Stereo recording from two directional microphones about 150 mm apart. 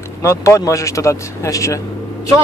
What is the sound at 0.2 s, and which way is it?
A man's voice, 20° left (ahead or behind).